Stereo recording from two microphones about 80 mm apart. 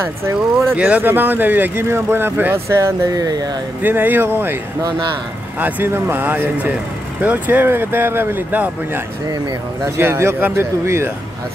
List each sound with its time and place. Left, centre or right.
0.2 s speech: right
0.7 s speech: centre
3.1 s speech: right
3.8 s speech: right
5.6 s speech: right